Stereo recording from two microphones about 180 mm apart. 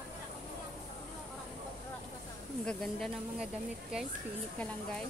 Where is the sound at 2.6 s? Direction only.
Centre (ahead or behind).